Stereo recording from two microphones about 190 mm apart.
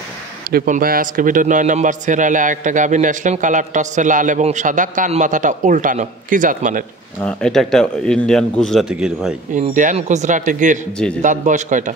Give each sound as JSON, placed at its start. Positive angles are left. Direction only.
{"t": 0.5, "sound": "a man's voice", "side_deg": -50}
{"t": 7.2, "sound": "a man's voice", "side_deg": 5}
{"t": 9.5, "sound": "a man's voice", "side_deg": -40}